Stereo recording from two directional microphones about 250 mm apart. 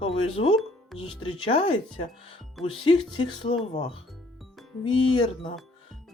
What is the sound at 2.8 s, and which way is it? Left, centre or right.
Speech, centre.